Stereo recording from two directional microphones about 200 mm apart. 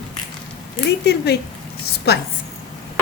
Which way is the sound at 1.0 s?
55° left (ahead or behind).